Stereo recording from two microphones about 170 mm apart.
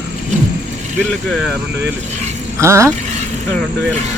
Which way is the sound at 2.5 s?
15° right (ahead or behind).